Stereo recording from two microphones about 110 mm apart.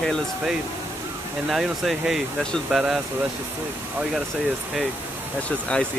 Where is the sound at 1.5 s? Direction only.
Centre (ahead or behind).